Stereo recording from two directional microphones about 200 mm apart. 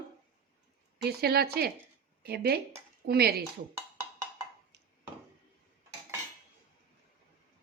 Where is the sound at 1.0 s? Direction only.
50° right (ahead or behind).